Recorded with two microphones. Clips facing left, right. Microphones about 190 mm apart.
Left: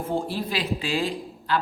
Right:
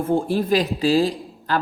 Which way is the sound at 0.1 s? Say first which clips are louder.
Right 9 dB; 50° right (ahead or behind).